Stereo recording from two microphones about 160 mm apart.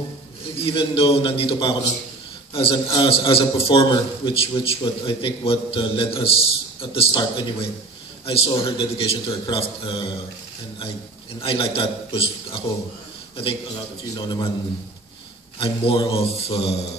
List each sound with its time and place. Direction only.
0.6 s a man's voice: 35° left (ahead or behind)
11.4 s a man's voice: 35° left (ahead or behind)
14.1 s a man's voice: 30° left (ahead or behind)
15.6 s a man's voice: 35° left (ahead or behind)